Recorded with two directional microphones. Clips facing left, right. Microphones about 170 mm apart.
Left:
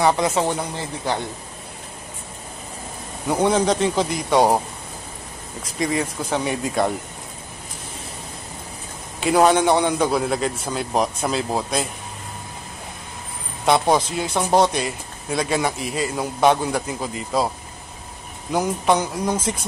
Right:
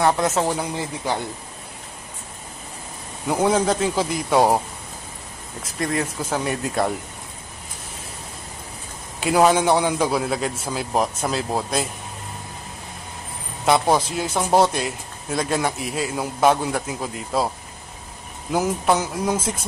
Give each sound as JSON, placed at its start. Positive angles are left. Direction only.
{"t": 0.0, "sound": "a man's voice", "side_deg": 0}
{"t": 3.3, "sound": "a man's voice", "side_deg": 0}
{"t": 5.6, "sound": "a man's voice", "side_deg": 0}
{"t": 9.2, "sound": "a man's voice", "side_deg": 0}
{"t": 13.7, "sound": "a man's voice", "side_deg": -5}
{"t": 18.5, "sound": "a man's voice", "side_deg": -5}